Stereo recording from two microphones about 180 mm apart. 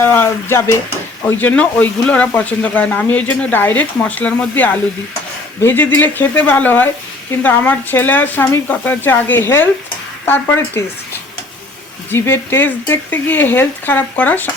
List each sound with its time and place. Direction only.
0.0 s speech: 10° left (ahead or behind)
12.1 s speech: 10° left (ahead or behind)